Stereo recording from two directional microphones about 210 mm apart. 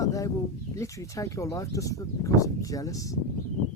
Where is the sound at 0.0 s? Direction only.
15° left (ahead or behind).